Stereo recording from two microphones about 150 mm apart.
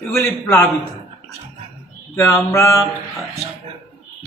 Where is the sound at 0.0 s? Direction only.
5° left (ahead or behind).